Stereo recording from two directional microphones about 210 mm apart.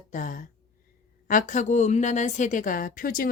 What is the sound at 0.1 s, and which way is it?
Speech, 40° left (ahead or behind).